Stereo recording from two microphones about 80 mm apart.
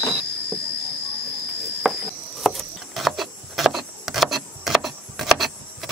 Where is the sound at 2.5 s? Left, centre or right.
Centre.